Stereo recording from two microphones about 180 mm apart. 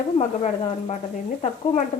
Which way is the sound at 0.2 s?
40° left (ahead or behind).